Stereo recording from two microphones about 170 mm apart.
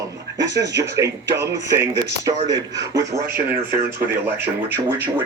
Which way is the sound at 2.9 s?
10° right (ahead or behind).